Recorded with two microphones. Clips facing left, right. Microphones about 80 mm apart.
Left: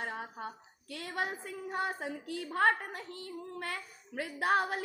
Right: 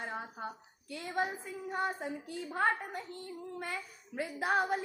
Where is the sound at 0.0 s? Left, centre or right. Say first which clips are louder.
Left 1 dB; left.